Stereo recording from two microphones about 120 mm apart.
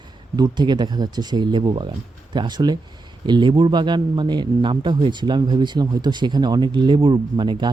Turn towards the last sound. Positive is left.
turn(degrees=-40)  # may be behind; listen again after turning